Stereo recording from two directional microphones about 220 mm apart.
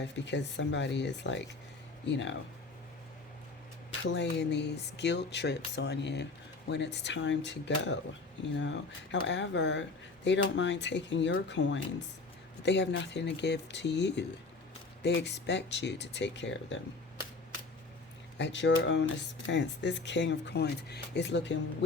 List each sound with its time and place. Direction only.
0.0 s speech: 55° left (ahead or behind)
4.0 s speech: 50° left (ahead or behind)
18.3 s speech: 55° left (ahead or behind)